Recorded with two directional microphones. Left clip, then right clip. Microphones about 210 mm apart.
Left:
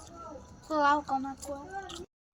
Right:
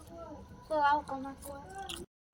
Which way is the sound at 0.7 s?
60° left (ahead or behind).